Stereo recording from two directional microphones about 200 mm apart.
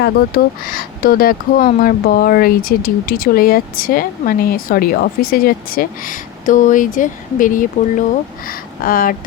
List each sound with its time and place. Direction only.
0.0 s speech: 50° left (ahead or behind)